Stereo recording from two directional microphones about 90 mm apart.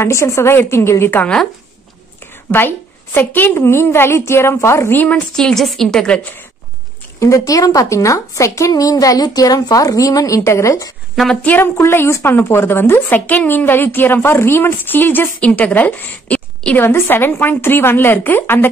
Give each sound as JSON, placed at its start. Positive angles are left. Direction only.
{"t": 0.0, "sound": "a woman's voice", "side_deg": 30}
{"t": 1.1, "sound": "speech", "side_deg": 15}
{"t": 2.5, "sound": "a woman's voice", "side_deg": 25}
{"t": 5.1, "sound": "a woman's voice", "side_deg": 5}
{"t": 7.2, "sound": "a woman's voice", "side_deg": 35}
{"t": 11.4, "sound": "a woman's voice", "side_deg": 25}